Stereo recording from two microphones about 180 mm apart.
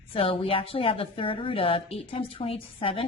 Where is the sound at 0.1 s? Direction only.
30° left (ahead or behind).